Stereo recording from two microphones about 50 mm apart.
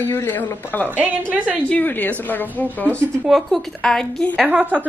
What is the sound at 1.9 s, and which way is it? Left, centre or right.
Speech, left.